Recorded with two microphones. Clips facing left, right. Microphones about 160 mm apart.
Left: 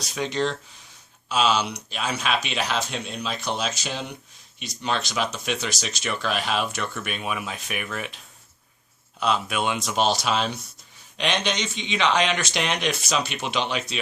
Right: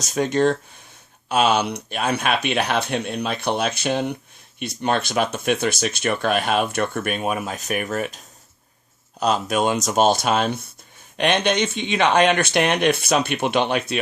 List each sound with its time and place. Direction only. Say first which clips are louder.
0.0 s speech: right 7 dB; 45° right (ahead or behind)
9.2 s speech: right 4 dB; 40° right (ahead or behind)